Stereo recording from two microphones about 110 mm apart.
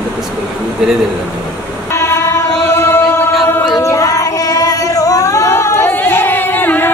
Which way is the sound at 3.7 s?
30° left (ahead or behind).